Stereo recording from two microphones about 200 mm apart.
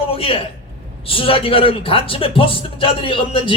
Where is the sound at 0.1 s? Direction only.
30° left (ahead or behind).